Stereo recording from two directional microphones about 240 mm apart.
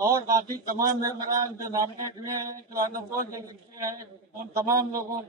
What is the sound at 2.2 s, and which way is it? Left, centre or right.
Speech, centre.